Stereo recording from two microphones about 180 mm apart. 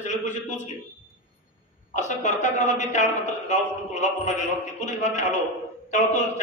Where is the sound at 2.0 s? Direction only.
40° left (ahead or behind).